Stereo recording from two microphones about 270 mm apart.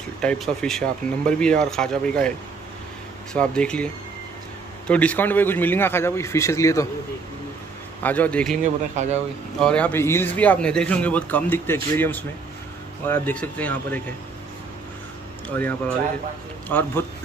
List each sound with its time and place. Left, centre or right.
0.2 s speech: centre
3.3 s a man's voice: centre
8.0 s speech: centre
8.9 s speech: right
9.6 s speech: centre
15.4 s a man's voice: centre